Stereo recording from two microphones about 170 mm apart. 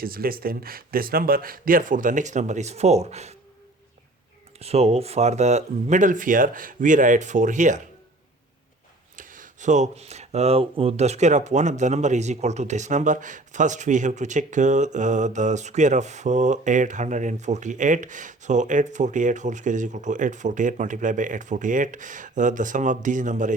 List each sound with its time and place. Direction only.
0.0 s speech: 60° right (ahead or behind); by 3.3 s 40° right (ahead or behind)
4.6 s speech: 40° right (ahead or behind)
9.1 s speech: 50° right (ahead or behind)